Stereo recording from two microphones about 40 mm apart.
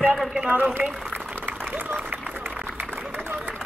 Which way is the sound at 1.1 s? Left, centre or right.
Right.